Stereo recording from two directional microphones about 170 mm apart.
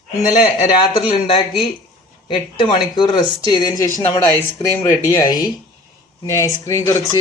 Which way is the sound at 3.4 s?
25° left (ahead or behind).